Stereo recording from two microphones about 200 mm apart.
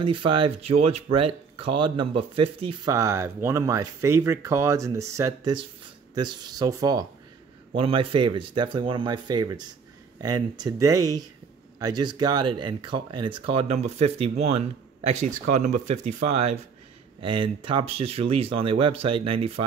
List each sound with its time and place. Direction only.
0.0 s speech: 25° right (ahead or behind)
2.9 s speech: 15° right (ahead or behind)